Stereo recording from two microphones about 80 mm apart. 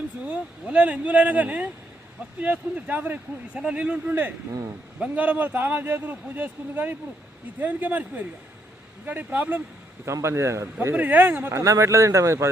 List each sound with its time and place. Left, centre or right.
0.3 s a man's voice: centre
10.1 s speech: right
10.9 s speech: right